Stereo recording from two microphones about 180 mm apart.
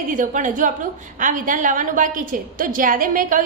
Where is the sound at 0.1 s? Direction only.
45° right (ahead or behind).